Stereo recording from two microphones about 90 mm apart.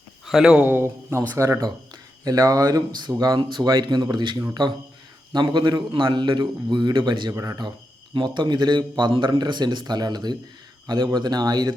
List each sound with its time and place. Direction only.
0.3 s speech: 5° right (ahead or behind)
0.6 s speech: 25° right (ahead or behind)
1.4 s a man's voice: 35° right (ahead or behind); by 7.3 s 55° right (ahead or behind)
7.3 s speech: 45° right (ahead or behind)
8.1 s a man's voice: 55° right (ahead or behind)